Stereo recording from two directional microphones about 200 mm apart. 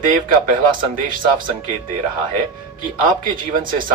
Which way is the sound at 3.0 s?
45° right (ahead or behind).